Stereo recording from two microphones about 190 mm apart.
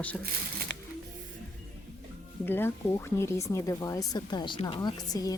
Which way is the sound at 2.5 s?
10° left (ahead or behind).